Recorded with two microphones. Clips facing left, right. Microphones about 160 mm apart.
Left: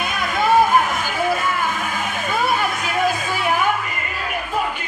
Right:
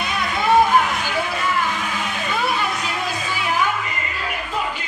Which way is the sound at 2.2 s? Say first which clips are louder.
Left 2 dB; 45° left (ahead or behind).